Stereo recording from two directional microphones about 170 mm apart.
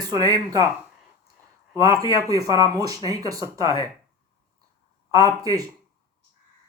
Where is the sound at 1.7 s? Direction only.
20° right (ahead or behind).